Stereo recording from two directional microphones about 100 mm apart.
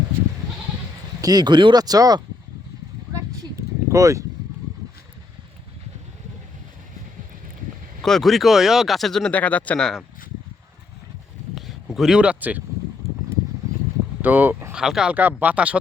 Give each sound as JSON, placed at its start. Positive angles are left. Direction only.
{"t": 1.2, "sound": "speech", "side_deg": -45}
{"t": 3.1, "sound": "a sound", "side_deg": -35}
{"t": 8.0, "sound": "speech", "side_deg": 0}
{"t": 9.3, "sound": "speech", "side_deg": 15}
{"t": 11.5, "sound": "speech", "side_deg": 0}
{"t": 14.2, "sound": "speech", "side_deg": -20}
{"t": 14.7, "sound": "speech", "side_deg": -5}
{"t": 15.1, "sound": "speech", "side_deg": -15}